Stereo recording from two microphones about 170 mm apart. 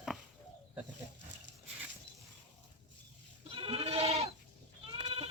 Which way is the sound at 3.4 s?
35° right (ahead or behind).